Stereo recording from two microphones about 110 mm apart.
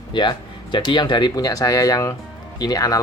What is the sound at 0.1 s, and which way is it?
Speech, 45° left (ahead or behind).